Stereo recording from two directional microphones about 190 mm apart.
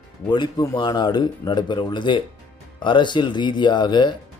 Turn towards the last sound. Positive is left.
turn(degrees=25)  # may be behind; listen again after turning